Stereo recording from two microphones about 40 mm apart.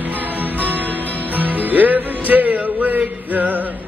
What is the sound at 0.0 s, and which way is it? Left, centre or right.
Music, right.